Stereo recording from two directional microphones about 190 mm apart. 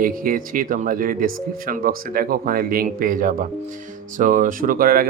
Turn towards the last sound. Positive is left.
turn(degrees=-50)  # may be behind; listen again after turning